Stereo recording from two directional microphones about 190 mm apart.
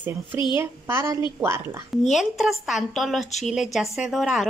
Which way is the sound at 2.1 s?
Centre (ahead or behind).